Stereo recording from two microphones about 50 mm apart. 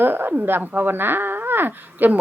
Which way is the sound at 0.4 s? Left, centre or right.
Right.